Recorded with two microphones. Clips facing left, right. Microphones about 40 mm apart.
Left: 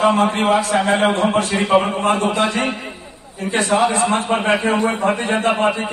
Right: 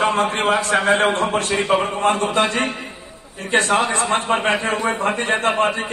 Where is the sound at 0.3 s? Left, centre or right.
Right.